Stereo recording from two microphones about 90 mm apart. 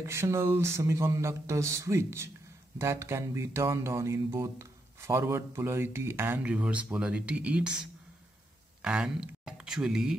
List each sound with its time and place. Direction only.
0.0 s speech: 30° right (ahead or behind)
6.4 s speech: 15° right (ahead or behind)